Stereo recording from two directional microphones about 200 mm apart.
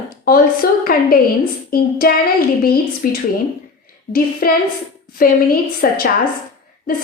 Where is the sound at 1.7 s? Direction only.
50° left (ahead or behind).